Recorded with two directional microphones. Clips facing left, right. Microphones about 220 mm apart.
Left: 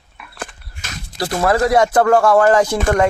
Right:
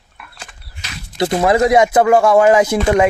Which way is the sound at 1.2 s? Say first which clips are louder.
Right 3 dB; 20° right (ahead or behind).